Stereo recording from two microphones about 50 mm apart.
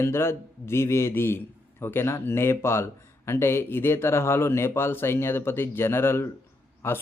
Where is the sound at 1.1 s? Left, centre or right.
Left.